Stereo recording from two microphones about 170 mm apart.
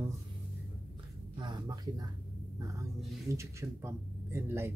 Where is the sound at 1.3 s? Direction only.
25° right (ahead or behind).